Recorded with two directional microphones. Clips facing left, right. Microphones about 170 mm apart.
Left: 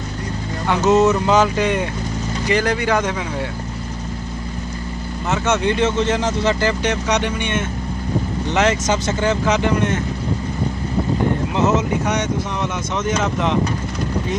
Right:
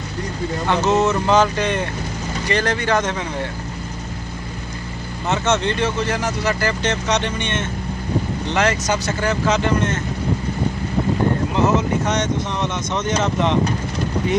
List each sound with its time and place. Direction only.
0.9 s speech: 15° left (ahead or behind)
5.3 s speech: 10° left (ahead or behind)
8.5 s speech: 20° left (ahead or behind)
11.5 s speech: 15° left (ahead or behind)
12.9 s speech: 5° left (ahead or behind)